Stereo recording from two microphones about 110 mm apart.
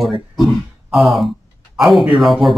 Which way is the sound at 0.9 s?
Centre (ahead or behind).